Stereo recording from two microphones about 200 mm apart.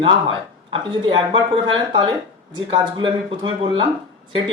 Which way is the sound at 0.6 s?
25° right (ahead or behind).